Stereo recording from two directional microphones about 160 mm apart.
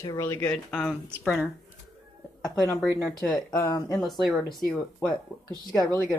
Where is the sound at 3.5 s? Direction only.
20° left (ahead or behind).